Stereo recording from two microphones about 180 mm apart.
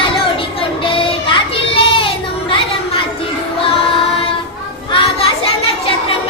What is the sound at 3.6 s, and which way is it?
Music, 30° left (ahead or behind).